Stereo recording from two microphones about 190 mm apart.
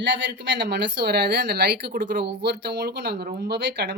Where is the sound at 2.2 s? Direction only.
60° right (ahead or behind).